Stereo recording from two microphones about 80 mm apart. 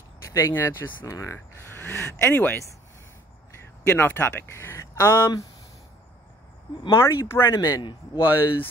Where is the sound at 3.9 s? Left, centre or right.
Left.